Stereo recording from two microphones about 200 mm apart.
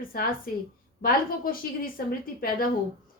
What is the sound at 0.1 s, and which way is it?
A woman's voice, 45° left (ahead or behind).